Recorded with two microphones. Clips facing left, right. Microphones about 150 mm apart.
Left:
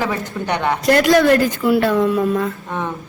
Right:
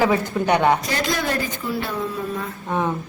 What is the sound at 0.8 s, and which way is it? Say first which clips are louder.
Speech: left 11 dB; 70° left (ahead or behind).